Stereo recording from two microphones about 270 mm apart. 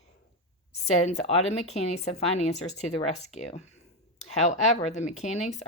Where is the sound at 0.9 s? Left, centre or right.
Left.